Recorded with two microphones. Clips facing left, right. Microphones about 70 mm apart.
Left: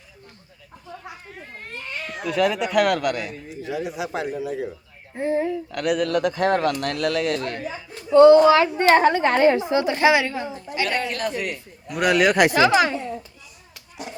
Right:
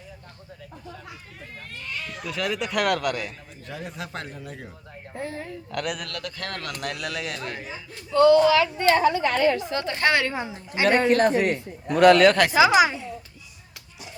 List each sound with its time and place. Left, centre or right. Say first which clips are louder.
2.3 s a man's voice: left 7 dB; centre
5.1 s a woman's voice: left 10 dB; left
5.7 s a man's voice: left 6 dB; centre
6.1 s a woman's voice: left 14 dB; left
6.7 s a man's voice: left 9 dB; centre
7.6 s a woman's voice: left 5 dB; left
9.0 s a woman's voice: left 3 dB; left
9.4 s a woman's voice: left 5 dB; left; by 10.3 s centre
10.3 s a woman's voice: left 2 dB; centre
10.8 s a man's voice: right 6 dB; right
11.9 s a woman's voice: right 3 dB; centre
12.5 s a woman's voice: even; centre